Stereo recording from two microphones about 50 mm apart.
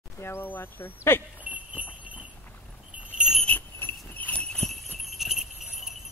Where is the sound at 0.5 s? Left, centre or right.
Left.